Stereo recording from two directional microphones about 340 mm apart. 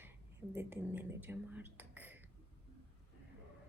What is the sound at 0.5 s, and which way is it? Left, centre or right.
Speech, centre.